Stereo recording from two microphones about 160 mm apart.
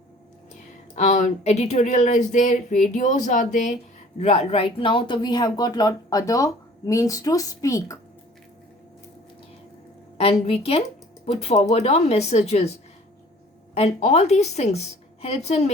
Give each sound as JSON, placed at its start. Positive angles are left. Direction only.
{"t": 0.9, "sound": "speech", "side_deg": 45}
{"t": 4.2, "sound": "speech", "side_deg": 40}
{"t": 10.2, "sound": "speech", "side_deg": 35}
{"t": 13.7, "sound": "speech", "side_deg": 40}